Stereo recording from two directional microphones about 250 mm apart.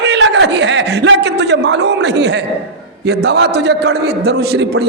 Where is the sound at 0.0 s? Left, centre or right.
Right.